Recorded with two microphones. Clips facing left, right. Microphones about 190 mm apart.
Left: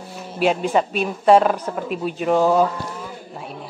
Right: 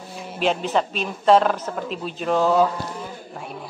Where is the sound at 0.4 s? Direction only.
10° left (ahead or behind).